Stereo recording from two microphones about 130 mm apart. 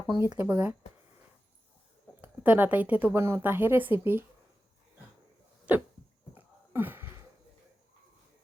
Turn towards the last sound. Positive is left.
turn(degrees=-15)  # may be behind; listen again after turning